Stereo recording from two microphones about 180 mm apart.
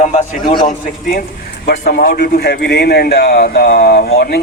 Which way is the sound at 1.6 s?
50° left (ahead or behind).